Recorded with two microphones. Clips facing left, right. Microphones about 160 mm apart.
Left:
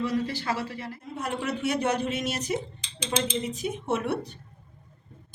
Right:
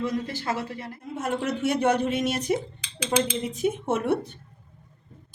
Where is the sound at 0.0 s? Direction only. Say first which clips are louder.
Even; 45° right (ahead or behind).